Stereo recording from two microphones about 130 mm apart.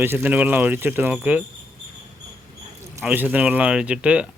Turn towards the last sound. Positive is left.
turn(degrees=-10)  # may be behind; listen again after turning